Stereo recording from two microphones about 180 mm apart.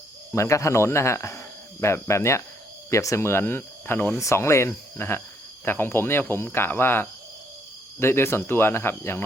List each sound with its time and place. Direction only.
0.3 s speech: 15° left (ahead or behind)